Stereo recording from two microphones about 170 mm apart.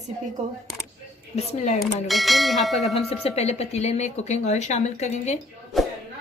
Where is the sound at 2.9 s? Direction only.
35° left (ahead or behind).